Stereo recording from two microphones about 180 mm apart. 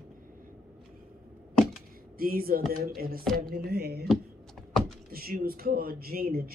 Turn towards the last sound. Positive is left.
turn(degrees=-55)  # may be behind; listen again after turning